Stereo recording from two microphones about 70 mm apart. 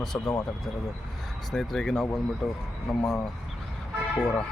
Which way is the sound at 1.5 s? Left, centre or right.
Centre.